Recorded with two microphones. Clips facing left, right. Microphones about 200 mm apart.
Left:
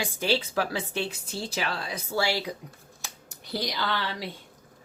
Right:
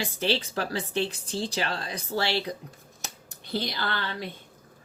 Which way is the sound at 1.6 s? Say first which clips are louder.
Even; 40° right (ahead or behind).